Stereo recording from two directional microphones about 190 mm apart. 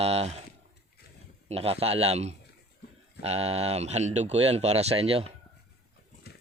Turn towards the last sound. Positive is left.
turn(degrees=-30)  # may be behind; listen again after turning